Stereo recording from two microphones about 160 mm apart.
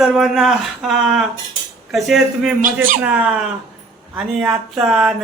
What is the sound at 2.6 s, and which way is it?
Speech, 55° right (ahead or behind).